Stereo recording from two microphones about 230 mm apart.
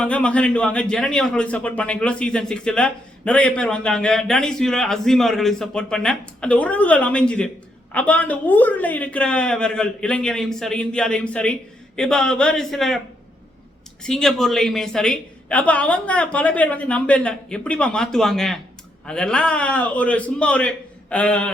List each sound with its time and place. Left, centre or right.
0.0 s speech: centre
14.0 s speech: centre